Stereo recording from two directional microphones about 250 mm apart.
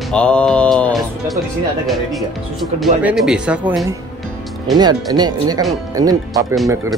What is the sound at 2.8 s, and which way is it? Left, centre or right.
Speech, centre.